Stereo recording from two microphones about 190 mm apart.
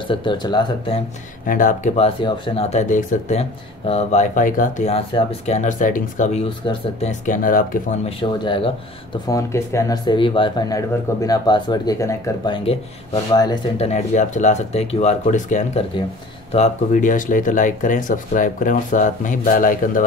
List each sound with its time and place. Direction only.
0.1 s speech: 25° left (ahead or behind)
1.4 s speech: 45° left (ahead or behind)
6.6 s speech: 25° left (ahead or behind)
7.1 s speech: 45° left (ahead or behind)
8.2 s speech: 25° left (ahead or behind)
9.3 s speech: 15° left (ahead or behind)
13.8 s speech: 40° left (ahead or behind)